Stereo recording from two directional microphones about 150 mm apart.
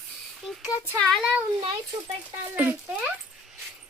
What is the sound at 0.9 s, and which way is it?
Speech, centre (ahead or behind).